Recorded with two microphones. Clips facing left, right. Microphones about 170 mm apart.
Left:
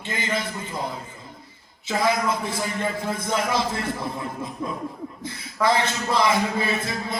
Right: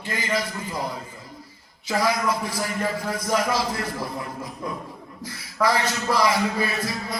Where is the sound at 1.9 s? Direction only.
25° left (ahead or behind).